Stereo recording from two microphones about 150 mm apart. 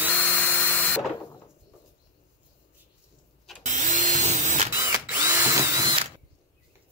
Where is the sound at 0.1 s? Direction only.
10° left (ahead or behind).